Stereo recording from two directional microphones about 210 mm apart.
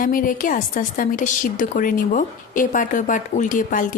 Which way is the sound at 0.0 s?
40° left (ahead or behind).